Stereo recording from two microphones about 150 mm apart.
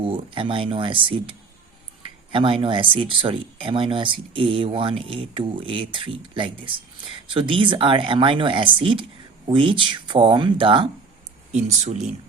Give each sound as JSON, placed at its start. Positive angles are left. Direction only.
{"t": 0.0, "sound": "speech", "side_deg": -35}
{"t": 11.5, "sound": "speech", "side_deg": -50}